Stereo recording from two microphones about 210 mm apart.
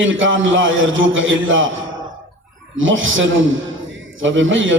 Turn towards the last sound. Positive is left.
turn(degrees=-65)  # may be behind; listen again after turning